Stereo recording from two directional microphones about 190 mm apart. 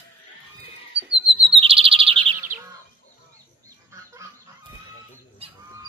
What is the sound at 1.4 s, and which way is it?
Bird, 30° right (ahead or behind).